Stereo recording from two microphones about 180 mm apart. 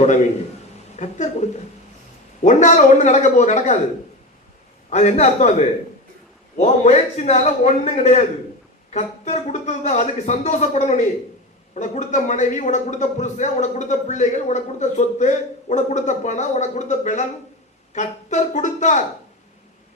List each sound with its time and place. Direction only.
0.9 s speech: 40° left (ahead or behind)
4.9 s speech: 40° left (ahead or behind)